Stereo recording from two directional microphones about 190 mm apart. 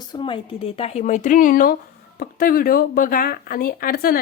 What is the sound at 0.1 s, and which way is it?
Speech, 25° left (ahead or behind).